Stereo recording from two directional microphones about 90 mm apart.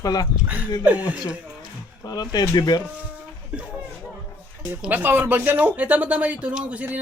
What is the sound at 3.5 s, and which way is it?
Speech, 15° right (ahead or behind).